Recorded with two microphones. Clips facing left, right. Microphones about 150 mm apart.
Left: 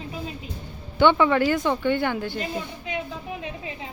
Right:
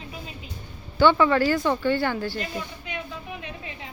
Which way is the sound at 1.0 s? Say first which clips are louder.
Even; 15° left (ahead or behind).